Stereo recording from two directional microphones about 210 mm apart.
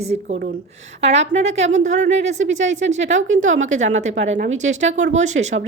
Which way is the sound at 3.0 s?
65° right (ahead or behind).